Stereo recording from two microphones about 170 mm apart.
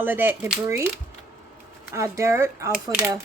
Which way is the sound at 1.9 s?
15° right (ahead or behind).